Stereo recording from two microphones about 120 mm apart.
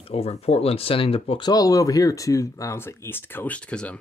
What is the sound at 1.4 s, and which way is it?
Speech, 30° left (ahead or behind).